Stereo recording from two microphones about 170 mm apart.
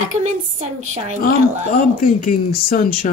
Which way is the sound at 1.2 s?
60° left (ahead or behind).